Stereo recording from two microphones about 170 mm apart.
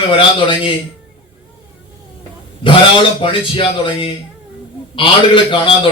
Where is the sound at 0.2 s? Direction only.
30° left (ahead or behind).